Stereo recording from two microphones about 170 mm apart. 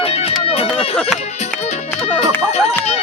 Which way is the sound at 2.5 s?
40° left (ahead or behind).